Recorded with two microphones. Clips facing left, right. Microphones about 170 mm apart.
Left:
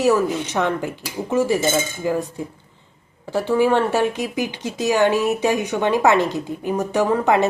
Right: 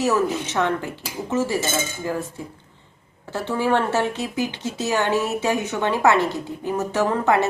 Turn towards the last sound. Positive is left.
turn(degrees=15)  # may be behind; listen again after turning